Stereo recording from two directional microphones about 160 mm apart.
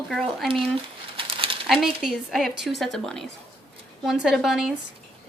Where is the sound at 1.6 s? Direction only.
Centre (ahead or behind).